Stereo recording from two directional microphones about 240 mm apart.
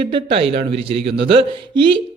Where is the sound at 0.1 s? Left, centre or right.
Right.